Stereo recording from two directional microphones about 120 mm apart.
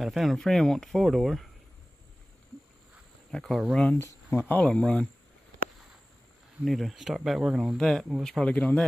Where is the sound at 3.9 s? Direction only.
20° left (ahead or behind).